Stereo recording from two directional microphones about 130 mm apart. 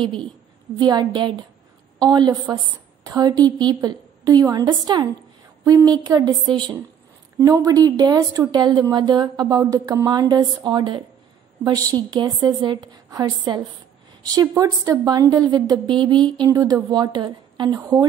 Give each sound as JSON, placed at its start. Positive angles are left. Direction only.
{"t": 0.0, "sound": "a woman's voice", "side_deg": -40}
{"t": 14.3, "sound": "a woman's voice", "side_deg": -25}